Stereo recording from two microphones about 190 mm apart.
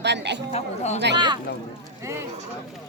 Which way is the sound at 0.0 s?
65° right (ahead or behind).